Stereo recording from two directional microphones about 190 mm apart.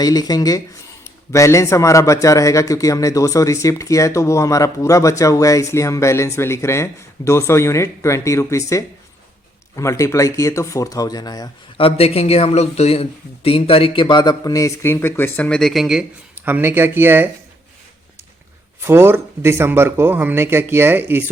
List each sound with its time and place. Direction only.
0.0 s a man's voice: 20° left (ahead or behind); by 17.2 s 10° right (ahead or behind)
18.8 s speech: 10° right (ahead or behind)